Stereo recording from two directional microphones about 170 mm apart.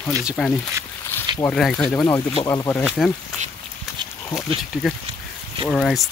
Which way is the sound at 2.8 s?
Centre (ahead or behind).